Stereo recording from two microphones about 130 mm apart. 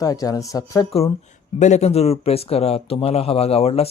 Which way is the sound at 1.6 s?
60° left (ahead or behind).